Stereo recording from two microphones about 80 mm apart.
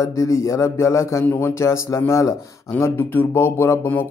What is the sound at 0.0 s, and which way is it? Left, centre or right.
Speech, left.